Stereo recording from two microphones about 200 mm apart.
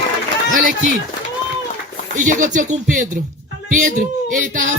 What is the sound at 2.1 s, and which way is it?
Speech, 40° right (ahead or behind).